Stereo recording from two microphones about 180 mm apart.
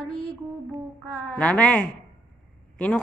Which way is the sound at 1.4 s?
5° left (ahead or behind).